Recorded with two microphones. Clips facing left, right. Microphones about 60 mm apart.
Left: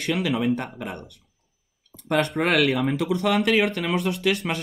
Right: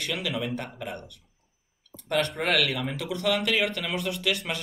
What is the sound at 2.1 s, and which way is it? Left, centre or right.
Speech, left.